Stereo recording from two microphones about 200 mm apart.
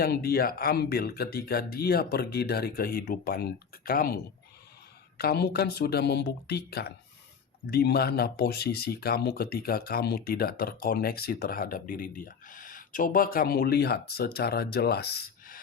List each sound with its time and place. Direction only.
0.0 s speech: 50° left (ahead or behind)